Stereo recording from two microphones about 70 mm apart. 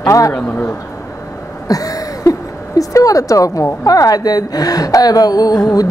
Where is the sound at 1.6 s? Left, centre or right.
Left.